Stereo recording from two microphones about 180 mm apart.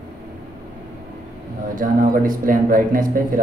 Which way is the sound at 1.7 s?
50° right (ahead or behind).